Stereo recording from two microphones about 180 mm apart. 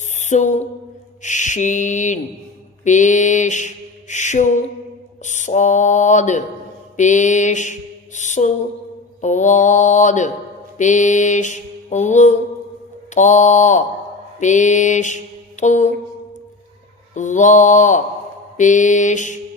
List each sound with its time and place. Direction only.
0.2 s a sound: 40° left (ahead or behind)
1.2 s mantra: 45° left (ahead or behind)
17.2 s mantra: 45° left (ahead or behind)